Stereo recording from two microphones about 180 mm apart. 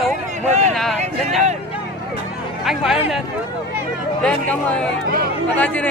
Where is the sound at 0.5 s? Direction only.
40° right (ahead or behind).